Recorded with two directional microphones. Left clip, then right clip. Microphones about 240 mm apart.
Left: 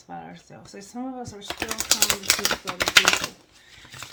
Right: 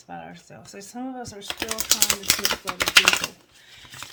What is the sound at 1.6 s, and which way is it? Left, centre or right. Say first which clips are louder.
Typing: even; centre.